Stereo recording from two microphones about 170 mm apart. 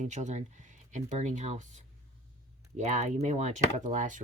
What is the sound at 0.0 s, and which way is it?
Speech, 45° right (ahead or behind).